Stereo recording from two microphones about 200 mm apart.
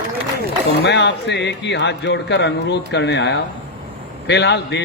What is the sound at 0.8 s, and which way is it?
A man's voice, 65° left (ahead or behind).